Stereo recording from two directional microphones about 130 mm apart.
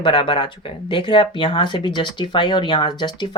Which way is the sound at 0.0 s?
40° left (ahead or behind).